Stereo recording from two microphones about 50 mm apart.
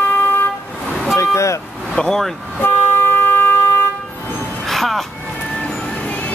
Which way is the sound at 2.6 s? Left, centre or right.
Left.